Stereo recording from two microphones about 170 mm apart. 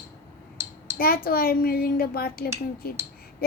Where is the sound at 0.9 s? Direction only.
60° left (ahead or behind).